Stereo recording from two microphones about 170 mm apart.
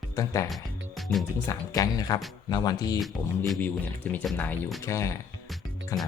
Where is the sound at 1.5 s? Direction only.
20° left (ahead or behind).